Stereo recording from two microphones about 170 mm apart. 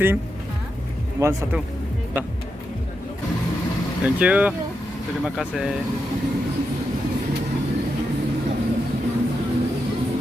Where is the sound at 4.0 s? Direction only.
10° right (ahead or behind).